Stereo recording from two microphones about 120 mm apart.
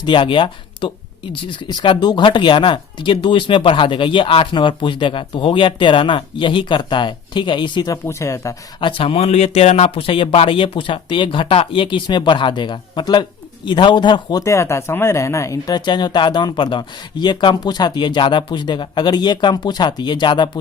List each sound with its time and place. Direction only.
0.0 s speech: 45° left (ahead or behind)
8.0 s speech: 25° left (ahead or behind)
8.8 s speech: 50° left (ahead or behind)
14.4 s speech: 25° left (ahead or behind); by 20.5 s 40° left (ahead or behind)